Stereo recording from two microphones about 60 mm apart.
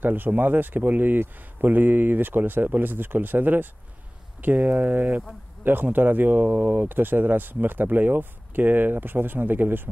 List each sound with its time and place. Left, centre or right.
0.0 s speech: right